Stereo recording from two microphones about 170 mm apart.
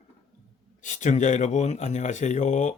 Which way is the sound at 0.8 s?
45° left (ahead or behind).